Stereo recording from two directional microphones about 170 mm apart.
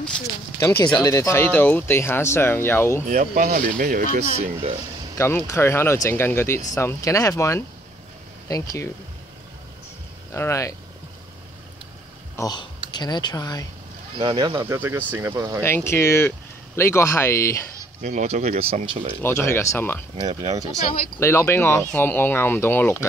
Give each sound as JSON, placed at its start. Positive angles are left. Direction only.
{"t": 0.6, "sound": "speech", "side_deg": 15}
{"t": 3.1, "sound": "speech", "side_deg": -50}
{"t": 4.2, "sound": "speech", "side_deg": -35}
{"t": 5.1, "sound": "speech", "side_deg": 15}
{"t": 10.3, "sound": "speech", "side_deg": 15}
{"t": 12.4, "sound": "speech", "side_deg": 25}
{"t": 14.1, "sound": "speech", "side_deg": -30}
{"t": 14.7, "sound": "speech", "side_deg": -15}
{"t": 15.6, "sound": "speech", "side_deg": 15}
{"t": 18.0, "sound": "speech", "side_deg": -45}
{"t": 19.2, "sound": "speech", "side_deg": 15}
{"t": 20.2, "sound": "speech", "side_deg": -25}
{"t": 21.2, "sound": "speech", "side_deg": 15}